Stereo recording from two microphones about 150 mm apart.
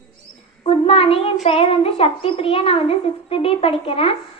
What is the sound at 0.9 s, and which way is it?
A woman's voice, 40° left (ahead or behind).